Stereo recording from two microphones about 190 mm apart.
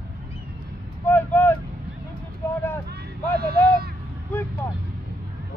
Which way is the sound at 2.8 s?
55° right (ahead or behind).